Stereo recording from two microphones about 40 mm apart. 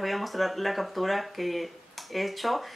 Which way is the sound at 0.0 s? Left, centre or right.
Centre.